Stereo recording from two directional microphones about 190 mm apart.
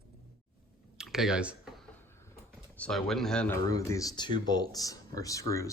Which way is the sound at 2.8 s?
Centre (ahead or behind).